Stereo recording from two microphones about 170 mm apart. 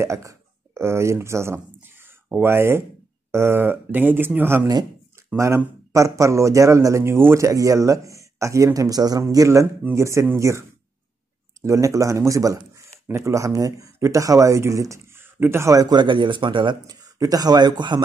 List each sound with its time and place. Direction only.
0.0 s a man's voice: 20° right (ahead or behind)
11.6 s speech: 20° right (ahead or behind)